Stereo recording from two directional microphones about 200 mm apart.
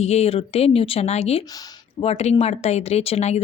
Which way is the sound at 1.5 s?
20° left (ahead or behind).